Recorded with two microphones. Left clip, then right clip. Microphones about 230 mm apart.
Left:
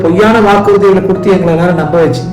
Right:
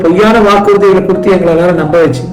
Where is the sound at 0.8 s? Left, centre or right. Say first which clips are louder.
Right 1 dB; centre.